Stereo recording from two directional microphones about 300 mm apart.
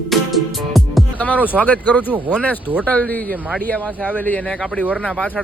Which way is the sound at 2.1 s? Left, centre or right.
Centre.